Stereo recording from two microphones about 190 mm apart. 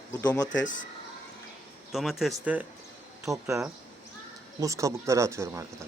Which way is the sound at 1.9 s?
Centre (ahead or behind).